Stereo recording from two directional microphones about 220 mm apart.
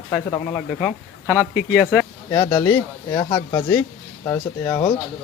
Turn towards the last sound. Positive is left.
turn(degrees=15)  # may be behind; listen again after turning